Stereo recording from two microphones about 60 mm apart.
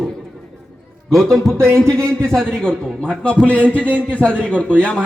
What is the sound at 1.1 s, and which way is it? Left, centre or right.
A man's voice, centre.